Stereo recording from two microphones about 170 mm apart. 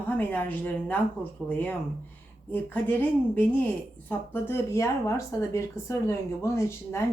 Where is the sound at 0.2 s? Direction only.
10° left (ahead or behind).